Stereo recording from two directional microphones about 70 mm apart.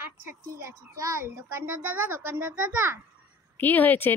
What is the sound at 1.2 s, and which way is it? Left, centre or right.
A child's voice, right.